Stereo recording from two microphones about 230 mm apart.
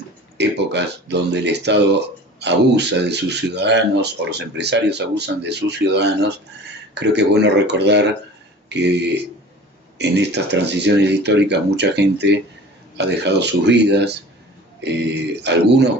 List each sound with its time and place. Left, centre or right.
0.3 s speech: right